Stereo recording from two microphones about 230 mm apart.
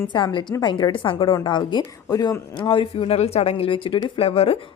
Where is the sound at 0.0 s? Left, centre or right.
Centre.